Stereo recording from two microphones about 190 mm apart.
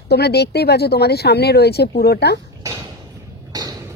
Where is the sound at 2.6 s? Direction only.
15° right (ahead or behind).